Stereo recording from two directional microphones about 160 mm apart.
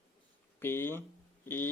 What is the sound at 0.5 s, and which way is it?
Speech, 15° left (ahead or behind).